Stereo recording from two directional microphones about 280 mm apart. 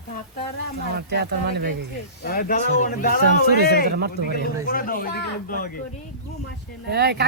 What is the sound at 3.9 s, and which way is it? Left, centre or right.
Speech, right.